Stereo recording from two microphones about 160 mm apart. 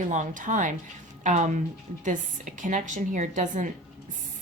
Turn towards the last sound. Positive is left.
turn(degrees=-50)  # may be behind; listen again after turning